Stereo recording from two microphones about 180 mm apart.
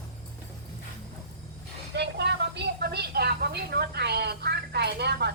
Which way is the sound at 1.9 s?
70° right (ahead or behind).